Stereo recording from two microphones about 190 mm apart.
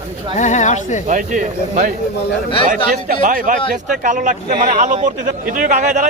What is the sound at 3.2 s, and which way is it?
Speech, 45° right (ahead or behind).